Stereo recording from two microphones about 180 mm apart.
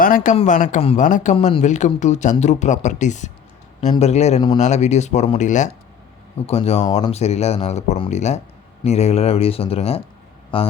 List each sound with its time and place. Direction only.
0.0 s a man's voice: 50° left (ahead or behind); by 10.7 s 30° left (ahead or behind)